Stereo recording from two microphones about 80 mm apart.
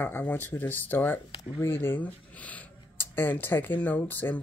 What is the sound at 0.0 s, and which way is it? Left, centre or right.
Speech, left.